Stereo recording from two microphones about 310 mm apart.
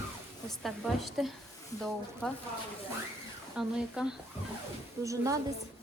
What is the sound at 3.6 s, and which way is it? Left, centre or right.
Speech, centre.